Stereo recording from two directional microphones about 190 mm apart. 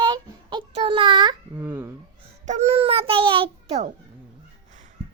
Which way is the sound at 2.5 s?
35° right (ahead or behind).